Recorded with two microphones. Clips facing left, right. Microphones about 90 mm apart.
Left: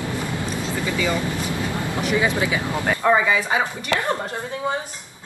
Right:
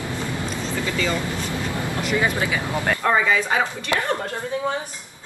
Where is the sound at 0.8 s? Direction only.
15° left (ahead or behind).